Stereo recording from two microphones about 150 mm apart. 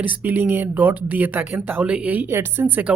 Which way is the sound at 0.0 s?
10° right (ahead or behind).